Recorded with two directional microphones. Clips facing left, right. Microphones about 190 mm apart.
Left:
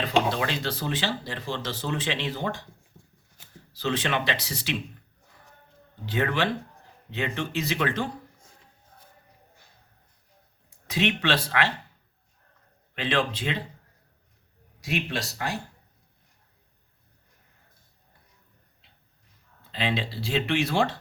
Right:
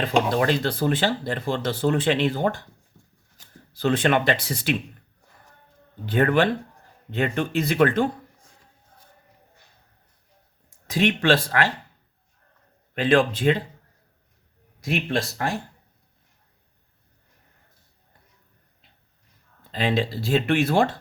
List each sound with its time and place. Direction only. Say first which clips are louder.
0.0 s speech: right 4 dB; 50° right (ahead or behind)
3.7 s speech: right 7 dB; 55° right (ahead or behind)
6.1 s speech: right 6 dB; 50° right (ahead or behind)
10.8 s speech: right 5 dB; 45° right (ahead or behind)
12.9 s speech: right 7 dB; 45° right (ahead or behind)
14.8 s speech: right 5 dB; 55° right (ahead or behind)
19.7 s speech: right 5 dB; 45° right (ahead or behind)